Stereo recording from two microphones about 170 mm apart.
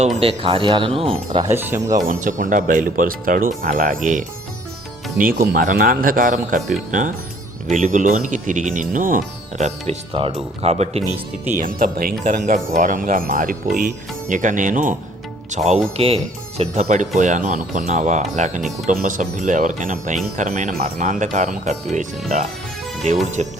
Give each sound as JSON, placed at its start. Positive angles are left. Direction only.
{"t": 0.0, "sound": "speech", "side_deg": -40}
{"t": 1.5, "sound": "speech", "side_deg": -15}
{"t": 2.0, "sound": "speech", "side_deg": -50}
{"t": 11.5, "sound": "speech", "side_deg": -55}
{"t": 23.2, "sound": "speech", "side_deg": -45}